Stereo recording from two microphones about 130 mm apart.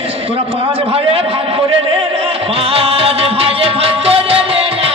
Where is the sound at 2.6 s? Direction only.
50° right (ahead or behind).